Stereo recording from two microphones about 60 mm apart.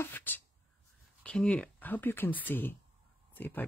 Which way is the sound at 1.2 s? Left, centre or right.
Centre.